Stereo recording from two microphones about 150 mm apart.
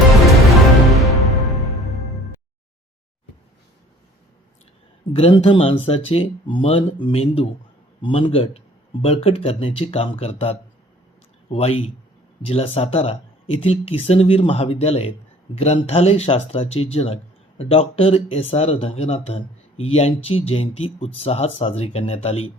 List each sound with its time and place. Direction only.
1.0 s music: centre (ahead or behind)
5.1 s speech: 40° left (ahead or behind)